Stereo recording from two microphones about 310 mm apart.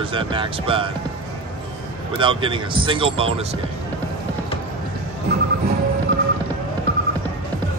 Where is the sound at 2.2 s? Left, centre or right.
Centre.